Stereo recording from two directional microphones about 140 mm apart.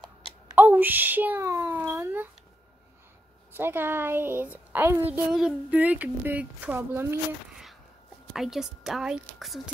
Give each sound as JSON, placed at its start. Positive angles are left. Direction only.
{"t": 0.6, "sound": "a child's voice", "side_deg": -10}
{"t": 3.5, "sound": "speech", "side_deg": -15}
{"t": 8.3, "sound": "a woman's voice", "side_deg": 0}